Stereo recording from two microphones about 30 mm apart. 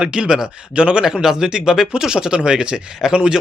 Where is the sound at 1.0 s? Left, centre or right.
Centre.